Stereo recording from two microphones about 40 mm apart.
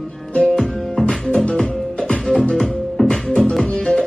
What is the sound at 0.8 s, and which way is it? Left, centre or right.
Music, centre.